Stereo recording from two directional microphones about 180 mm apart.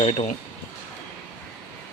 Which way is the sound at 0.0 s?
35° left (ahead or behind).